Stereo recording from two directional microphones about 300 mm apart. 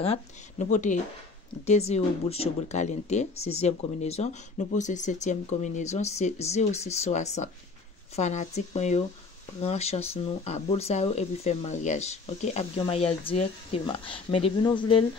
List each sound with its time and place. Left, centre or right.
0.0 s speech: left